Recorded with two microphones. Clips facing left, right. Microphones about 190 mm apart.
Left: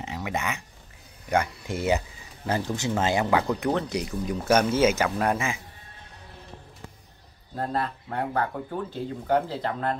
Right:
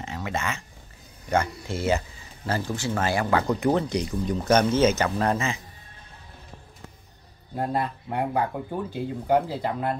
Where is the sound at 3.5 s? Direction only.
Centre (ahead or behind).